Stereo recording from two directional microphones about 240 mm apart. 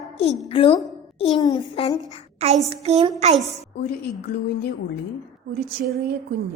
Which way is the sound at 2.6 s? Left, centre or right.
Right.